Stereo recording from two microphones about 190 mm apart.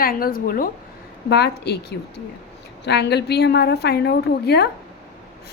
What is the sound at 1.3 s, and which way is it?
A woman's voice, 60° left (ahead or behind).